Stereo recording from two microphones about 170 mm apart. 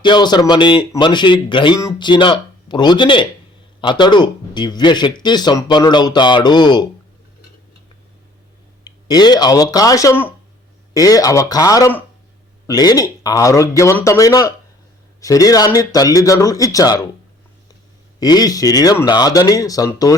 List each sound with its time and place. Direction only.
0.0 s speech: 25° left (ahead or behind)
8.8 s speech: 25° left (ahead or behind)
18.2 s speech: 25° left (ahead or behind)